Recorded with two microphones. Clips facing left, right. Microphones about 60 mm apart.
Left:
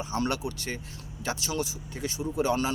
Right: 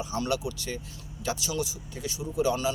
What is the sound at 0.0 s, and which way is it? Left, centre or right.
A man's voice, left.